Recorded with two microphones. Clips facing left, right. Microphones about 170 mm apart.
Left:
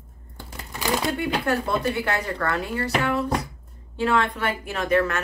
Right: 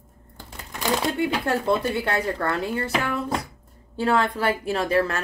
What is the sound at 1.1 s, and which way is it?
A woman's voice, 25° right (ahead or behind).